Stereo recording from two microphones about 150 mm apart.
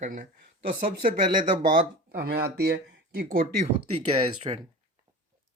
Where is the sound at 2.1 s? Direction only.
90° right.